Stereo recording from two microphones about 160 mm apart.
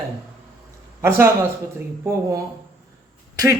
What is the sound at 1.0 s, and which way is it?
Speech, 15° right (ahead or behind).